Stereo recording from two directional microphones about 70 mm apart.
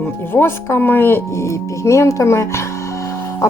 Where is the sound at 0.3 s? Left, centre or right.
Left.